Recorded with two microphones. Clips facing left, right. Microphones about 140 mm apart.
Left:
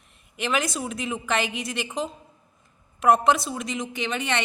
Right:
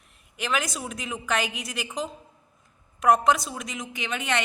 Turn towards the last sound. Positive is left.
turn(degrees=0)  # may be behind; listen again after turning